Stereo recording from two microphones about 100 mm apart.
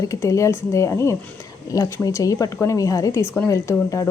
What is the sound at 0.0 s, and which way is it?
Speech, 30° left (ahead or behind).